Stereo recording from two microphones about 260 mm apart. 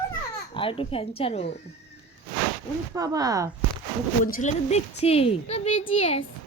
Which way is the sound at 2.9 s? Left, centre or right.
Centre.